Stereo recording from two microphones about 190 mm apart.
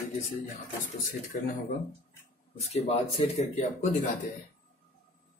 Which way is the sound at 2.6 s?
35° left (ahead or behind).